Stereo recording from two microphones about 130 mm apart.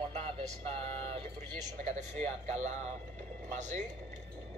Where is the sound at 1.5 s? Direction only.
65° right (ahead or behind).